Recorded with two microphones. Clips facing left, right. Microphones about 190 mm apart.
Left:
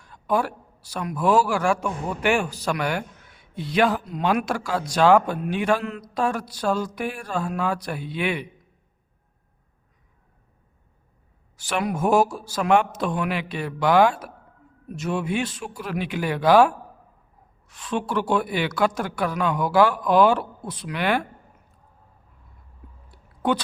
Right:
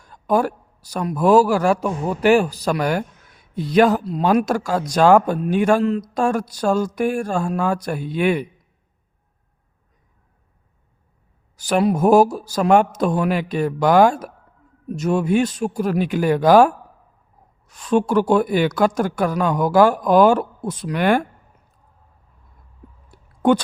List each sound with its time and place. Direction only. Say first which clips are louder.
0.0 s a man's voice: right 5 dB; 40° right (ahead or behind)
11.5 s a man's voice: right 8 dB; 40° right (ahead or behind)
23.1 s a sound: right 7 dB; 50° right (ahead or behind)